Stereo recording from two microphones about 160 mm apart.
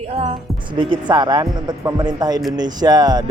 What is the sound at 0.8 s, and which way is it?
Speech, 30° right (ahead or behind).